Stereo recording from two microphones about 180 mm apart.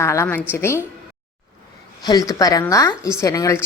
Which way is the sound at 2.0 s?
20° left (ahead or behind).